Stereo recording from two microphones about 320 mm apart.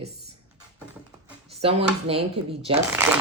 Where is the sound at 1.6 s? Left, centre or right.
Centre.